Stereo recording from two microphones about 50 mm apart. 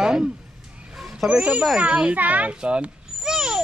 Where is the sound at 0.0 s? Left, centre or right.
Centre.